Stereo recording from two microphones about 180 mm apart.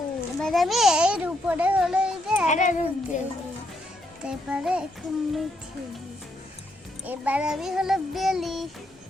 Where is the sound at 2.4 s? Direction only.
45° left (ahead or behind).